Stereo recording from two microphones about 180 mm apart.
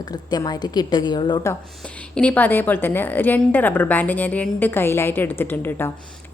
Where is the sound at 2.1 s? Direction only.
5° left (ahead or behind).